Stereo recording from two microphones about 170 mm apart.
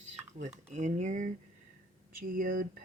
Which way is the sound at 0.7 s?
45° right (ahead or behind).